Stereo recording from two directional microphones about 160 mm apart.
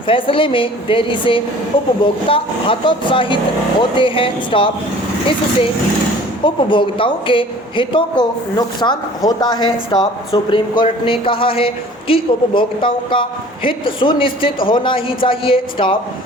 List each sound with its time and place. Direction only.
0.1 s speech: 35° left (ahead or behind)
6.4 s a woman's voice: 30° left (ahead or behind)